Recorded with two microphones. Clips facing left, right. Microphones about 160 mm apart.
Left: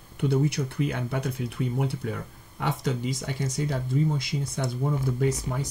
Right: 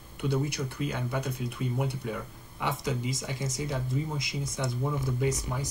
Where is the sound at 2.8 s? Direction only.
65° left (ahead or behind).